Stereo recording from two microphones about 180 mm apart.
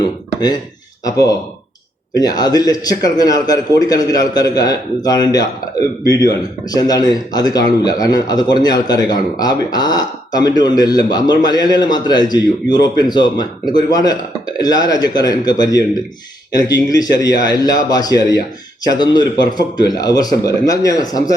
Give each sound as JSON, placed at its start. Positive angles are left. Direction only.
{"t": 0.0, "sound": "a man's voice", "side_deg": 25}
{"t": 16.9, "sound": "a man's voice", "side_deg": 20}